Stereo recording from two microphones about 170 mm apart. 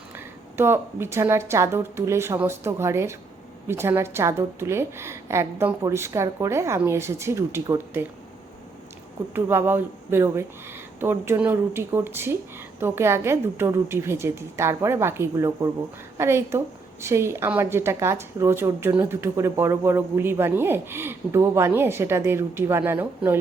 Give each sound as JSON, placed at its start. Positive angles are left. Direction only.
{"t": 0.2, "sound": "a woman's voice", "side_deg": -15}
{"t": 9.3, "sound": "a woman's voice", "side_deg": -10}